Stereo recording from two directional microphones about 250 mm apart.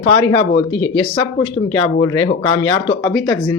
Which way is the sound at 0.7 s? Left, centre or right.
Left.